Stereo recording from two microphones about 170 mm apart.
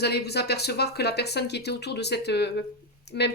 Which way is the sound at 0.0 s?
75° left (ahead or behind).